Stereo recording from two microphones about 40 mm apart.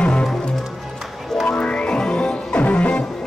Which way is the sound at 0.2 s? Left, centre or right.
Centre.